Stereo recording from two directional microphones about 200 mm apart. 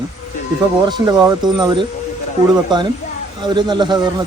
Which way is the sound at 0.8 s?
20° right (ahead or behind).